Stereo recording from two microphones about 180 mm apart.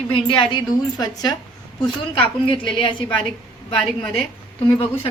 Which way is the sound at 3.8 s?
5° left (ahead or behind).